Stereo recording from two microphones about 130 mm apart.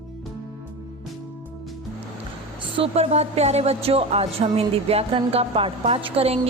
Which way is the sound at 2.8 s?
55° right (ahead or behind).